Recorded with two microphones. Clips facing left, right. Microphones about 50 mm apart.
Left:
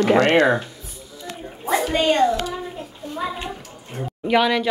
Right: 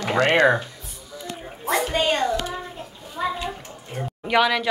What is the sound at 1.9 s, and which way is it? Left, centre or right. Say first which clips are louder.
Speech: left 6 dB; centre.